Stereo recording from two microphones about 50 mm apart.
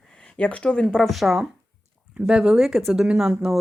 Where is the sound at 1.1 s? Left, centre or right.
Centre.